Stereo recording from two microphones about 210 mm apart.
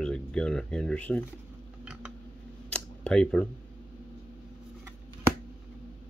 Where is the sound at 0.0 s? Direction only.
5° left (ahead or behind).